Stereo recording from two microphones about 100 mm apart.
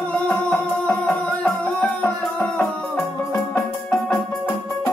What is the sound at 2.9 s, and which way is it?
Music, 35° left (ahead or behind).